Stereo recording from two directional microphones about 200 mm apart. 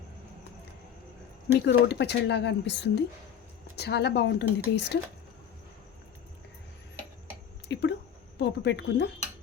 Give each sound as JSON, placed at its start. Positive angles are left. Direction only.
{"t": 1.5, "sound": "speech", "side_deg": 55}
{"t": 7.7, "sound": "a sound", "side_deg": 60}
{"t": 8.4, "sound": "speech", "side_deg": 60}